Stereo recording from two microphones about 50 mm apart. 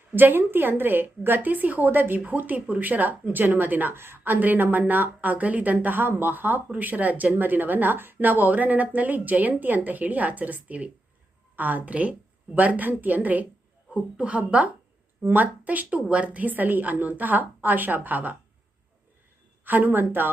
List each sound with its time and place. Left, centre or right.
0.2 s a woman's voice: right
19.6 s a woman's voice: right